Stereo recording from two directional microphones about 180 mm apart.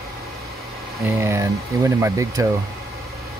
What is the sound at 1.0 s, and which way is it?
Speech, 15° right (ahead or behind).